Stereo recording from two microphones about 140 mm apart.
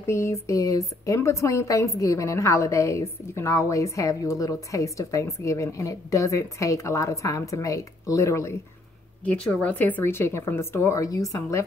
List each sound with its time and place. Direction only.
0.0 s speech: 20° left (ahead or behind)
9.2 s a woman's voice: 10° left (ahead or behind)